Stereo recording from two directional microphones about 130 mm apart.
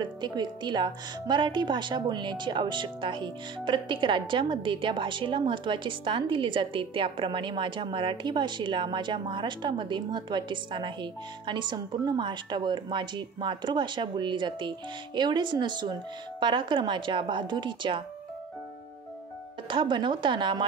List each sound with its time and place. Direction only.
0.0 s speech: 35° right (ahead or behind)
19.7 s speech: 40° right (ahead or behind)